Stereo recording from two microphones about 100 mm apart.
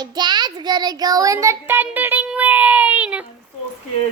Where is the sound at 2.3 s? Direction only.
15° right (ahead or behind).